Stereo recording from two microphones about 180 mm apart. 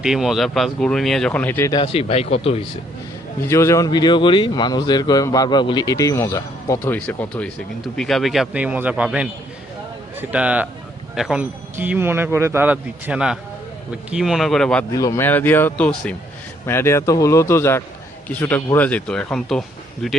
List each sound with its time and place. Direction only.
0.0 s speech: 5° right (ahead or behind)
1.7 s speech: 30° left (ahead or behind)
3.4 s speech: 15° left (ahead or behind)
14.9 s speech: 15° left (ahead or behind); by 20.1 s centre (ahead or behind)